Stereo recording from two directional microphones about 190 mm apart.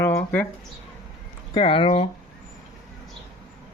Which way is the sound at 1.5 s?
25° left (ahead or behind).